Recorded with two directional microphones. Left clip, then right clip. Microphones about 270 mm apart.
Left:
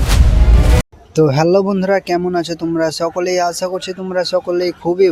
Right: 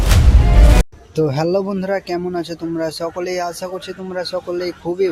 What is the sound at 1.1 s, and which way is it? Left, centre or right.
Speech, left.